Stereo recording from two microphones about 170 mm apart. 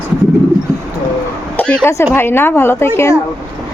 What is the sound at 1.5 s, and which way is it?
A woman's voice, 10° left (ahead or behind).